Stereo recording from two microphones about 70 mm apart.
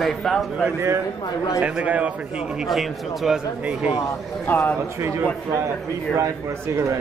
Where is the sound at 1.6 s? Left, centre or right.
Right.